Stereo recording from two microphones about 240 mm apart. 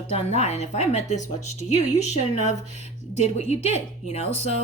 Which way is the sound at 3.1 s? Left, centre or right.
Left.